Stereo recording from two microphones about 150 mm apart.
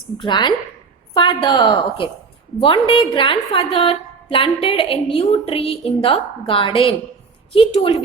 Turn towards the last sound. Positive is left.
turn(degrees=35)  # may be behind; listen again after turning